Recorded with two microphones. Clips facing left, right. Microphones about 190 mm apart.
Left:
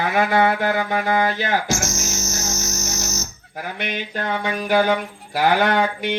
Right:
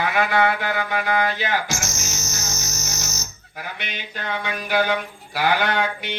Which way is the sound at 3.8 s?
50° left (ahead or behind).